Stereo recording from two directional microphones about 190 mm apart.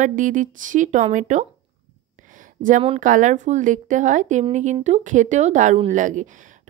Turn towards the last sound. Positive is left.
turn(degrees=-40)  # may be behind; listen again after turning